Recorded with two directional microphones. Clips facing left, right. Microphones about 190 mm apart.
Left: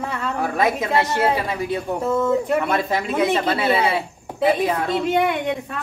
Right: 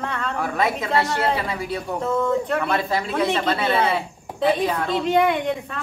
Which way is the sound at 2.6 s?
20° left (ahead or behind).